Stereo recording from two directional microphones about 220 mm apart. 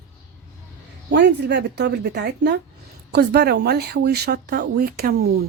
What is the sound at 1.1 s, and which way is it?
A woman's voice, 50° right (ahead or behind).